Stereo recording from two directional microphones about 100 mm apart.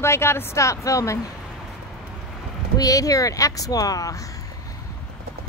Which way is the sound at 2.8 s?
35° left (ahead or behind).